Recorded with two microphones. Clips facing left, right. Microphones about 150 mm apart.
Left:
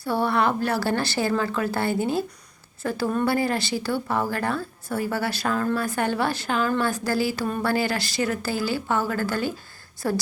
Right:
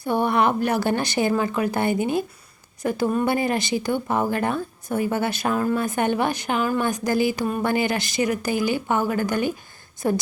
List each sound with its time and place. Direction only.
0.0 s a woman's voice: 20° right (ahead or behind)